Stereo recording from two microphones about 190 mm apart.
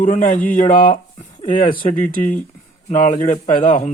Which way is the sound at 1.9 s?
45° left (ahead or behind).